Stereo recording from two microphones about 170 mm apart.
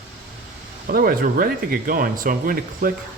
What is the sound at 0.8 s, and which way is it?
Speech, 60° right (ahead or behind).